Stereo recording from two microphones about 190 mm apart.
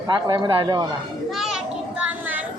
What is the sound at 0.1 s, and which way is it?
Speech, 25° right (ahead or behind).